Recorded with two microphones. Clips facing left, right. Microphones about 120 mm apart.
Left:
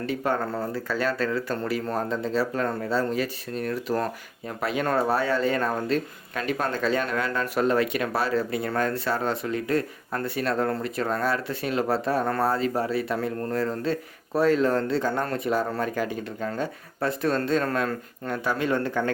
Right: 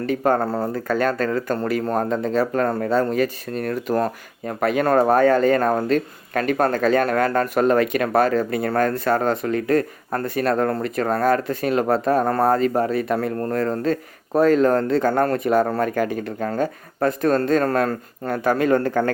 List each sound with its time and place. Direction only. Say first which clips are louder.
0.0 s speech: right 7 dB; 45° right (ahead or behind)